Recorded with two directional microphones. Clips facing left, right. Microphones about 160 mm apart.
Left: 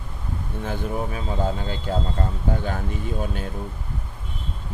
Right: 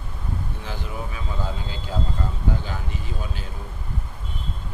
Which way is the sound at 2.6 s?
55° left (ahead or behind).